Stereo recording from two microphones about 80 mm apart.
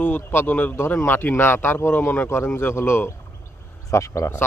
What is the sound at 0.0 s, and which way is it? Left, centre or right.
Speech, left.